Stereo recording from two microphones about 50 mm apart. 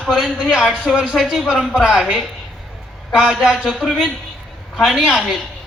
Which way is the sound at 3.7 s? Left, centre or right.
Centre.